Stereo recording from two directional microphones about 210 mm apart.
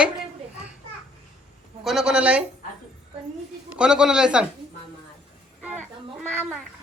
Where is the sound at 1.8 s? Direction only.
Centre (ahead or behind).